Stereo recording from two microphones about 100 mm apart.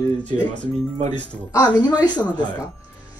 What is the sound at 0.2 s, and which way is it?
Speech, 15° left (ahead or behind).